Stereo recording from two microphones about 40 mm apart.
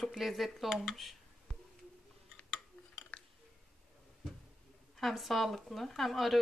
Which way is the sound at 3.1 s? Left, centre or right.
Left.